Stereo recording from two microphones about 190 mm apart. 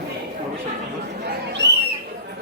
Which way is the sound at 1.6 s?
65° right (ahead or behind).